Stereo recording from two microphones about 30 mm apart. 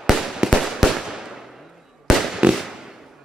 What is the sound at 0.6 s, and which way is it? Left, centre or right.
Fireworks, centre.